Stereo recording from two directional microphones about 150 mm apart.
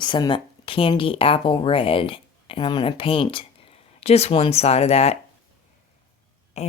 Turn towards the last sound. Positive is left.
turn(degrees=50)  # may be behind; listen again after turning